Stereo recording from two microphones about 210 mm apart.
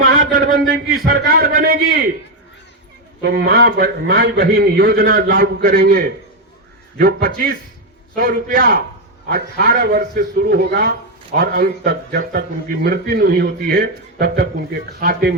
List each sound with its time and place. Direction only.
0.0 s a sound: 40° right (ahead or behind)
1.0 s a man's voice: 45° right (ahead or behind)
3.2 s a man's voice: 45° right (ahead or behind)